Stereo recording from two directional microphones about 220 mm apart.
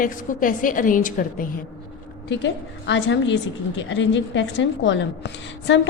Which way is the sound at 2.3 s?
55° left (ahead or behind).